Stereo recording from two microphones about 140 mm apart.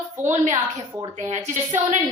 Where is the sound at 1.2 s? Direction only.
55° right (ahead or behind).